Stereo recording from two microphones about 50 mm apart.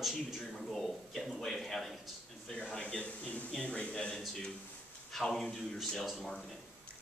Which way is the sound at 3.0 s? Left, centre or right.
Left.